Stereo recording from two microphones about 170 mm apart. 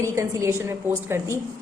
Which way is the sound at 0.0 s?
15° right (ahead or behind).